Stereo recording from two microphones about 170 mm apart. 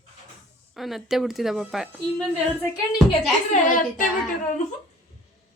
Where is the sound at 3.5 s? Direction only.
45° left (ahead or behind).